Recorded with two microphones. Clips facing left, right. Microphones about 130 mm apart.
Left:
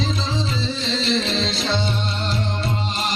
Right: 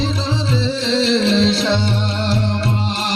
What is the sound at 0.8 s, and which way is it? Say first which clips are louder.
Music: right 7 dB; 65° right (ahead or behind).